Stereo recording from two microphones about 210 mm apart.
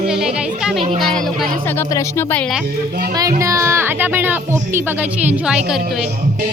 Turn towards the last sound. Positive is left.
turn(degrees=-5)  # may be behind; listen again after turning